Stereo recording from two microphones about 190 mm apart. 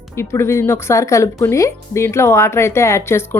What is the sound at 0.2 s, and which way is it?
Speech, 15° left (ahead or behind).